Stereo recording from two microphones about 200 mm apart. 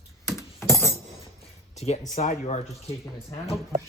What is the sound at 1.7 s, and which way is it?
Speech, 35° left (ahead or behind).